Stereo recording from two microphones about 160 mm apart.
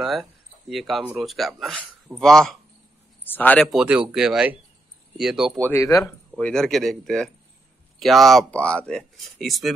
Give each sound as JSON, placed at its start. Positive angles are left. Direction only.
{"t": 0.0, "sound": "speech", "side_deg": 0}
{"t": 3.7, "sound": "speech", "side_deg": -5}
{"t": 5.6, "sound": "speech", "side_deg": 15}
{"t": 6.3, "sound": "speech", "side_deg": 5}